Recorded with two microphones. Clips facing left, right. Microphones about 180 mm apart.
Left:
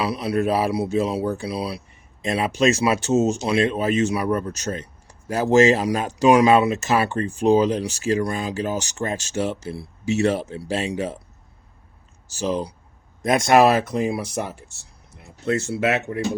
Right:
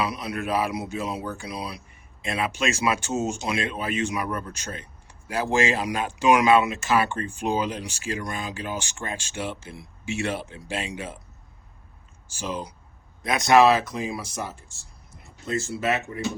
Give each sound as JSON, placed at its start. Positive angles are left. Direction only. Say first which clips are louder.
{"t": 0.0, "sound": "speech", "louder": "left 6 dB", "side_deg": 35}
{"t": 12.3, "sound": "speech", "louder": "left 7 dB", "side_deg": 40}
{"t": 13.2, "sound": "speech", "louder": "left 2 dB", "side_deg": 50}